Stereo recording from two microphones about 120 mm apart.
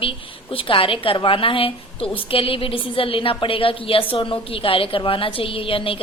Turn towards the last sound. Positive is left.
turn(degrees=50)  # may be behind; listen again after turning